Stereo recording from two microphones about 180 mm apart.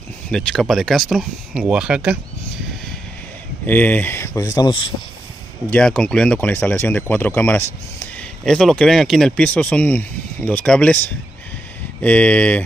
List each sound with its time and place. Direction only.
0.3 s speech: 5° left (ahead or behind)
3.6 s speech: 10° left (ahead or behind)
5.7 s speech: 5° left (ahead or behind)
12.0 s speech: 10° left (ahead or behind)